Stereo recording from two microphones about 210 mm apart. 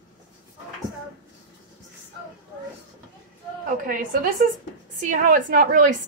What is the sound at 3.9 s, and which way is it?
A woman's voice, 40° right (ahead or behind).